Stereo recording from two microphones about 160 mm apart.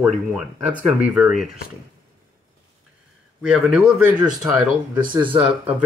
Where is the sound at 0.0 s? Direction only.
5° right (ahead or behind).